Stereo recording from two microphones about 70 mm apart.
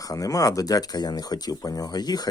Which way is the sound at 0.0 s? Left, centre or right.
Left.